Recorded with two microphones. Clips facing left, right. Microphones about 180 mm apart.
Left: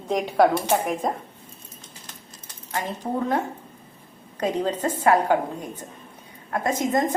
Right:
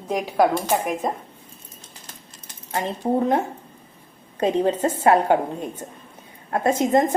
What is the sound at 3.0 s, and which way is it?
Speech, 20° right (ahead or behind).